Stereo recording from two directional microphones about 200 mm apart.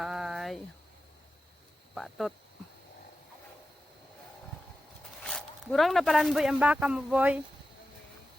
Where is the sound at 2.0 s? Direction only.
Centre (ahead or behind).